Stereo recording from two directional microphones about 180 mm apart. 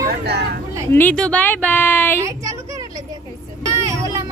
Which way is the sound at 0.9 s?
10° left (ahead or behind).